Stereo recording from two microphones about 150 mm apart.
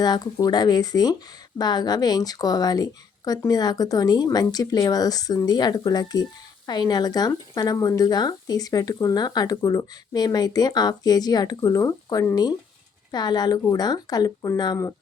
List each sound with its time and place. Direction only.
0.0 s speech: 25° left (ahead or behind)